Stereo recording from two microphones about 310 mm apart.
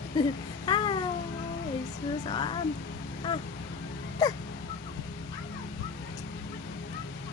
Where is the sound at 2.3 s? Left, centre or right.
Centre.